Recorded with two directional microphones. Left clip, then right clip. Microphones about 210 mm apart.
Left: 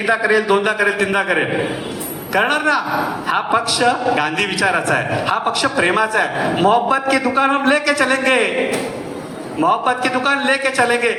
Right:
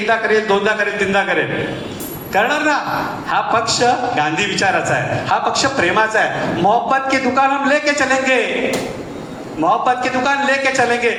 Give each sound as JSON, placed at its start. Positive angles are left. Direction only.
{"t": 0.1, "sound": "a man's voice", "side_deg": 50}
{"t": 9.6, "sound": "a man's voice", "side_deg": 50}